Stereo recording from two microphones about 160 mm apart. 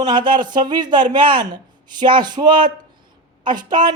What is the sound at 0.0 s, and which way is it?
Speech, 30° right (ahead or behind).